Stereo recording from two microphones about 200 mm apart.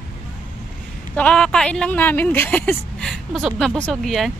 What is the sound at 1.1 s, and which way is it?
Speech, 5° left (ahead or behind).